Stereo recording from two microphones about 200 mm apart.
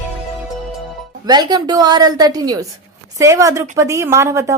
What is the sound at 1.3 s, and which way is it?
A woman's voice, 20° right (ahead or behind).